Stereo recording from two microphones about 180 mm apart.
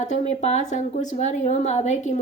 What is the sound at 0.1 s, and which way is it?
A woman's voice, 40° left (ahead or behind).